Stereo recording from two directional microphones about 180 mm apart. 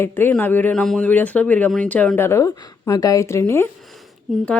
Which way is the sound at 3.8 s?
Centre (ahead or behind).